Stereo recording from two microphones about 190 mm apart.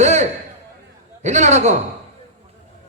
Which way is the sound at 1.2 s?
35° right (ahead or behind).